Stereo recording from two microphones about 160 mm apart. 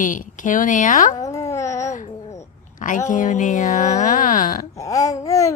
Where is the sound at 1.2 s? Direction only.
20° left (ahead or behind).